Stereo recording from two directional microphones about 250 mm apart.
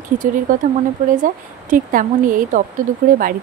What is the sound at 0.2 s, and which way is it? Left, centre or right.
A woman's voice, right.